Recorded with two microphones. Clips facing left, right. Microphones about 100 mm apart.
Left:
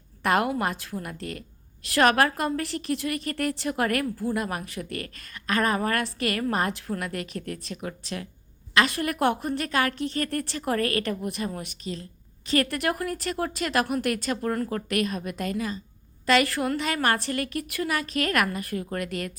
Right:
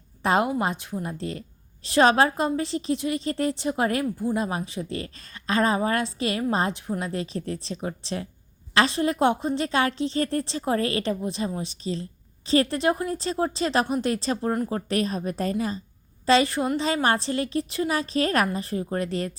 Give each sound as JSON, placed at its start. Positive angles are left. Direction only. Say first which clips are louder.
{"t": 0.2, "sound": "a woman's voice", "louder": "right 1 dB", "side_deg": -20}